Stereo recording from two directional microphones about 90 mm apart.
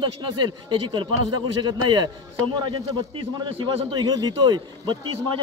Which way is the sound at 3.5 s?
55° right (ahead or behind).